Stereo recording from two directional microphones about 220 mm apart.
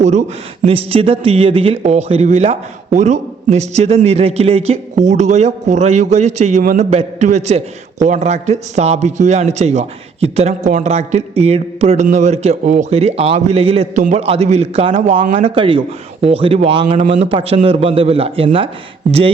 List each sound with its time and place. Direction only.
0.0 s a man's voice: 30° right (ahead or behind)